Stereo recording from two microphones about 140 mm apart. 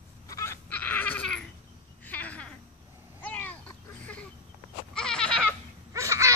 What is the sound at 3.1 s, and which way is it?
Cat, 10° left (ahead or behind).